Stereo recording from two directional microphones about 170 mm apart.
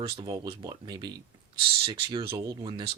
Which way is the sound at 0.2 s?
25° right (ahead or behind).